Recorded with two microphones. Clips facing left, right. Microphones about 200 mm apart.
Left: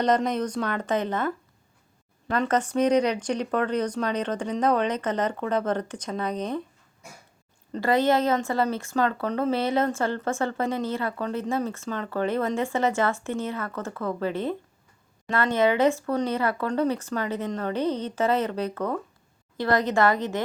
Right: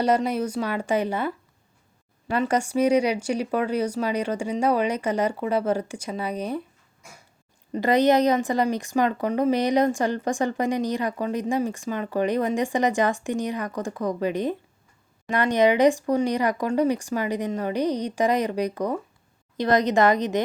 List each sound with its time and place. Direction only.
0.0 s speech: 10° right (ahead or behind)
7.7 s a woman's voice: 20° right (ahead or behind)